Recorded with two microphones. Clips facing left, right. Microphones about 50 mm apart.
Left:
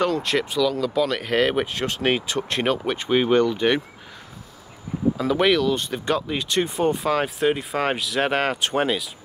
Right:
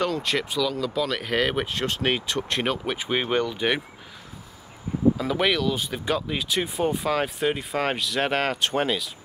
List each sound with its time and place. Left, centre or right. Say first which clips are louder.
0.0 s speech: left 3 dB; centre
5.1 s speech: left 4 dB; centre